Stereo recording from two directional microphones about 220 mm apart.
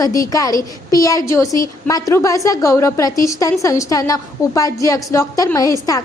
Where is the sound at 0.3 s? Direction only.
15° left (ahead or behind).